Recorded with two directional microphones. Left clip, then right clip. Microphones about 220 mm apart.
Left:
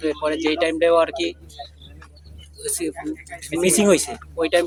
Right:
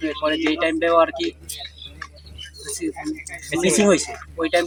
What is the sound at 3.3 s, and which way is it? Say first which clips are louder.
Speech: right 1 dB; 30° right (ahead or behind).